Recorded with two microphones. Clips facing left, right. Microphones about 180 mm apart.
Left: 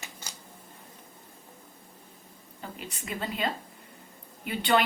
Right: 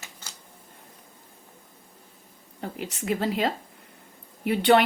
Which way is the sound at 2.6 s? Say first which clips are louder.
Right 7 dB; 70° right (ahead or behind).